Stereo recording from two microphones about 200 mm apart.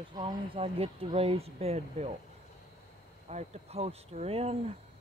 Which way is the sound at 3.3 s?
30° right (ahead or behind).